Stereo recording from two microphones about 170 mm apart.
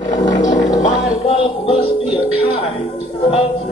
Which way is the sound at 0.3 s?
50° left (ahead or behind).